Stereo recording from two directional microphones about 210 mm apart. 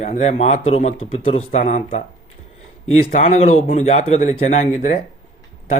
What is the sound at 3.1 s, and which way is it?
Speech, 30° left (ahead or behind).